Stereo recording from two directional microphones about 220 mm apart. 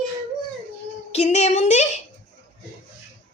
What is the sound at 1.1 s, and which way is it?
Speech, 30° left (ahead or behind).